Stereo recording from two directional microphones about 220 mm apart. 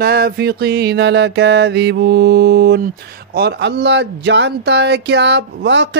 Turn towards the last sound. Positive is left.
turn(degrees=-55)  # may be behind; listen again after turning